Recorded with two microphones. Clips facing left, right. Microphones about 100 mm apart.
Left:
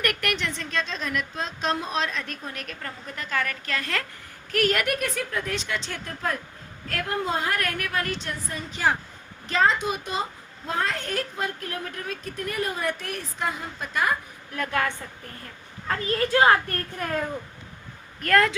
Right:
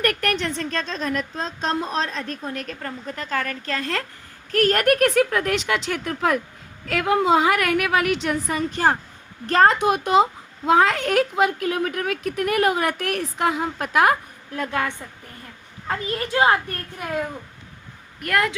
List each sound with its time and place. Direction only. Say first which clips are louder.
0.0 s a woman's voice: right 5 dB; 35° right (ahead or behind)
4.9 s a woman's voice: right 10 dB; 75° right (ahead or behind)
8.7 s speech: right 1 dB; 45° right (ahead or behind); by 10.2 s 75° right (ahead or behind)
10.7 s speech: right 10 dB; 90° right; by 14.2 s 75° right (ahead or behind)
14.5 s a child's voice: right 1 dB; 25° right (ahead or behind)